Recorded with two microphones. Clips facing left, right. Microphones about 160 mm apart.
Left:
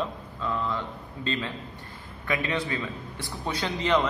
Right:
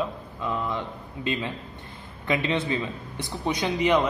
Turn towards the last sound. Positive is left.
turn(degrees=-15)  # may be behind; listen again after turning